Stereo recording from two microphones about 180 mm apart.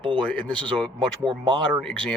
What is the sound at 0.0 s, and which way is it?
Speech, 30° right (ahead or behind).